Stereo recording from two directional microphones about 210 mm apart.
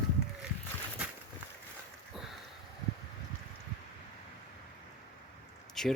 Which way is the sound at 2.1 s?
Centre (ahead or behind).